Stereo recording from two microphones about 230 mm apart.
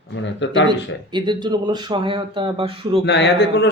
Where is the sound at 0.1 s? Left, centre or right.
Left.